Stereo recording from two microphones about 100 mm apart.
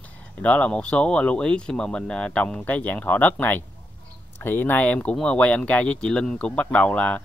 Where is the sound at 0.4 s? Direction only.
15° left (ahead or behind).